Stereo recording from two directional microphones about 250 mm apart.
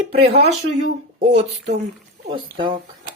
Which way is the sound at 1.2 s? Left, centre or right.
Right.